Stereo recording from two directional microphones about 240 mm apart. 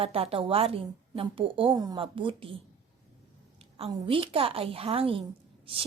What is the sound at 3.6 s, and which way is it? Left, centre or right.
A woman's voice, right.